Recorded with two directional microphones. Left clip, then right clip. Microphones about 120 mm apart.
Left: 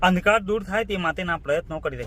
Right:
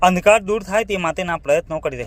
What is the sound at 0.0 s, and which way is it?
Speech, 25° right (ahead or behind).